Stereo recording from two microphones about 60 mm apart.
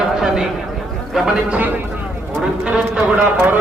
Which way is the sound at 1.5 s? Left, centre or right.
Right.